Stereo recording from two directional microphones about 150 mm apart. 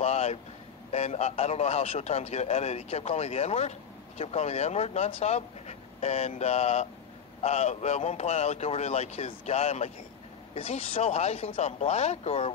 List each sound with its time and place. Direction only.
0.0 s vehicle: 45° left (ahead or behind)
0.9 s a man's voice: 45° left (ahead or behind)